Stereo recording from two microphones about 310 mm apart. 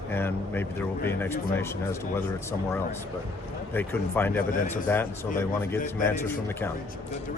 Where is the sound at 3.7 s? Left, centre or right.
Centre.